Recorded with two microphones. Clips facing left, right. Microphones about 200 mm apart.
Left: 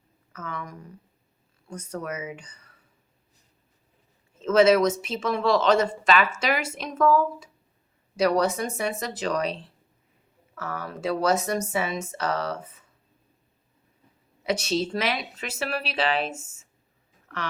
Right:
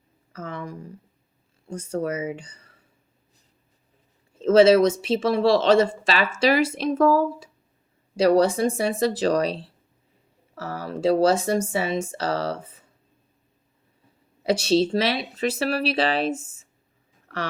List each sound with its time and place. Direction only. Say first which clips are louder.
0.3 s speech: right 3 dB; 30° right (ahead or behind)
4.4 s speech: right 4 dB; 30° right (ahead or behind)
14.4 s speech: right 6 dB; 30° right (ahead or behind)